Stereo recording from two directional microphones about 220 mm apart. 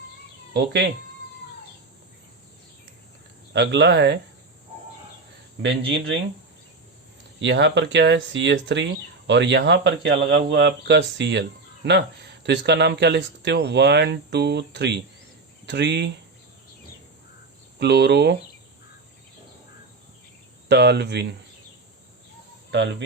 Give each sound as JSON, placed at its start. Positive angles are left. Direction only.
{"t": 0.5, "sound": "speech", "side_deg": -50}
{"t": 3.5, "sound": "speech", "side_deg": -50}
{"t": 7.4, "sound": "speech", "side_deg": -50}
{"t": 17.7, "sound": "speech", "side_deg": -50}
{"t": 20.7, "sound": "speech", "side_deg": -50}
{"t": 22.7, "sound": "speech", "side_deg": -50}